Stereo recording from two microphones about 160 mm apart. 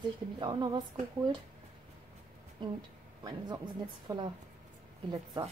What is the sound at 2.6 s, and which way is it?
Speech, 30° right (ahead or behind).